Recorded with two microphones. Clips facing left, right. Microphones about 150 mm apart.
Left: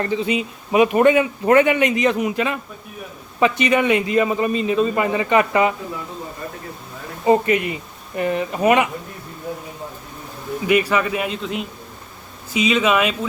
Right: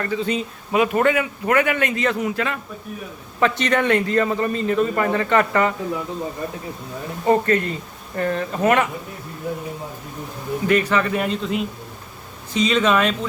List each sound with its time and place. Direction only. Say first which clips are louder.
0.0 s a man's voice: left 2 dB; 20° left (ahead or behind)
7.3 s a man's voice: left 1 dB; 15° left (ahead or behind)
10.7 s a man's voice: left 1 dB; 10° left (ahead or behind)